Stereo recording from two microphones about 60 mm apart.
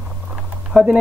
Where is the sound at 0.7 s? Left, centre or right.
Centre.